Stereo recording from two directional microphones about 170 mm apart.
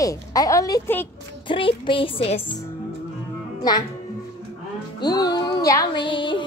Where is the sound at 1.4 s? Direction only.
30° left (ahead or behind).